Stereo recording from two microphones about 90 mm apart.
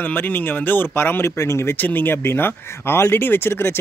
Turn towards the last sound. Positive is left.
turn(degrees=25)  # may be behind; listen again after turning